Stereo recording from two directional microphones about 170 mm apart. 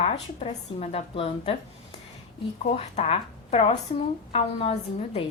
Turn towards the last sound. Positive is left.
turn(degrees=35)  # may be behind; listen again after turning